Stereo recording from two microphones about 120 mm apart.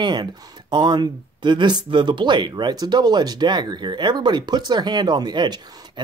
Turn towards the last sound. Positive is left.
turn(degrees=-40)  # may be behind; listen again after turning